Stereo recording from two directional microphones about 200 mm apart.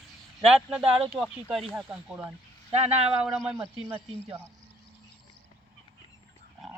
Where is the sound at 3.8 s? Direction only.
25° right (ahead or behind).